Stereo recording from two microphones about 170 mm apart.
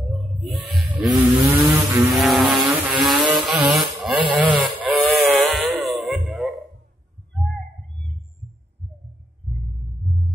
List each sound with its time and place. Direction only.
0.4 s music: centre (ahead or behind)
1.0 s vehicle: 20° right (ahead or behind)
2.1 s vehicle: centre (ahead or behind)
3.4 s a sound: centre (ahead or behind)
4.8 s sheep: 5° right (ahead or behind)
10.0 s heart murmur: centre (ahead or behind)